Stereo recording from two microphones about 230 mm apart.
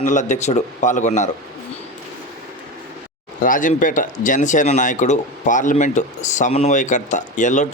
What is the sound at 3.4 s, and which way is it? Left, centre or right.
Speech, left.